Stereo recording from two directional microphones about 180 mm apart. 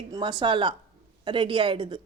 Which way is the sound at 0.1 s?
25° right (ahead or behind).